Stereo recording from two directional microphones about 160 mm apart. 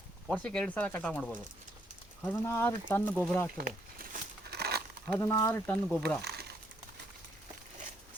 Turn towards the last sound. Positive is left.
turn(degrees=-85)